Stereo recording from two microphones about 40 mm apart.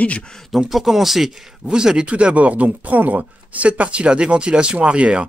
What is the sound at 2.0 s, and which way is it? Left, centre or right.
Speech, right.